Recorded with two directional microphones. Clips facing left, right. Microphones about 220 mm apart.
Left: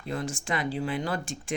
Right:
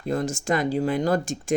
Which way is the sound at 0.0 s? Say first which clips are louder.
Right 7 dB; 45° right (ahead or behind).